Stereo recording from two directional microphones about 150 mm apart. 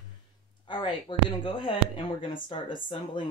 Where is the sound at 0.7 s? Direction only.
30° left (ahead or behind).